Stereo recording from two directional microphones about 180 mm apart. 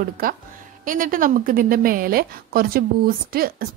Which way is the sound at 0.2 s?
55° right (ahead or behind).